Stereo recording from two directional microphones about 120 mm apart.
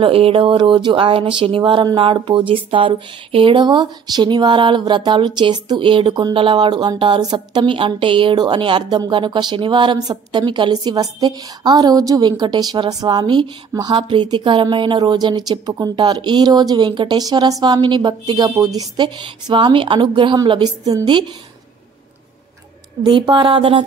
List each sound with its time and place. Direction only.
0.0 s a woman's voice: 50° right (ahead or behind); by 21.2 s 35° right (ahead or behind)
23.0 s speech: 40° right (ahead or behind)